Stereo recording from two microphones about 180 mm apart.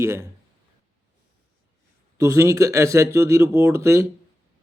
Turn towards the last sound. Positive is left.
turn(degrees=-15)  # may be behind; listen again after turning